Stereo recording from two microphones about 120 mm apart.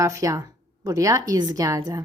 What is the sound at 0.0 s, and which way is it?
A woman's voice, 25° right (ahead or behind).